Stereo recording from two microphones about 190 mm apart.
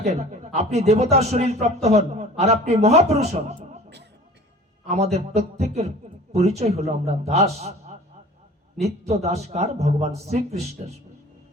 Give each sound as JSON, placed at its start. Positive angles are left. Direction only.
{"t": 0.0, "sound": "a man's voice", "side_deg": -35}
{"t": 5.1, "sound": "a man's voice", "side_deg": -35}
{"t": 8.8, "sound": "a man's voice", "side_deg": -35}